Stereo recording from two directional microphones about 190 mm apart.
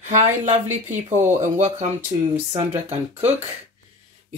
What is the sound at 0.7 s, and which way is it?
Speech, 10° right (ahead or behind).